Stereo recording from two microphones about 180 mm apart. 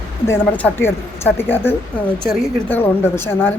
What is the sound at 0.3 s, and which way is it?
A woman's voice, 10° left (ahead or behind).